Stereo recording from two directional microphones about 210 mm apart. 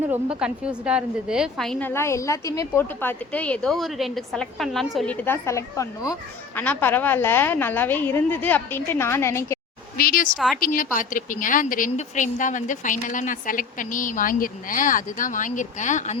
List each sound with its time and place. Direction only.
0.1 s a woman's voice: 5° right (ahead or behind); by 9.6 s 15° left (ahead or behind)
10.0 s speech: 45° left (ahead or behind)
10.3 s a woman's voice: centre (ahead or behind)
10.8 s a woman's voice: 40° left (ahead or behind)